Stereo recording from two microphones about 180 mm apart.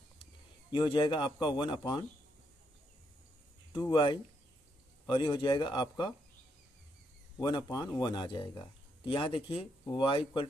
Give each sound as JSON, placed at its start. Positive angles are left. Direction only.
{"t": 0.7, "sound": "speech", "side_deg": 25}
{"t": 3.7, "sound": "speech", "side_deg": 25}
{"t": 7.3, "sound": "speech", "side_deg": 25}